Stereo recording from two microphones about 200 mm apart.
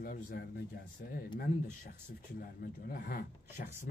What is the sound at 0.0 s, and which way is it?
Speech, 45° left (ahead or behind).